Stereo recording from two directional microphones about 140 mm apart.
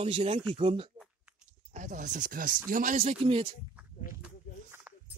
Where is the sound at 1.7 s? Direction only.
65° right (ahead or behind).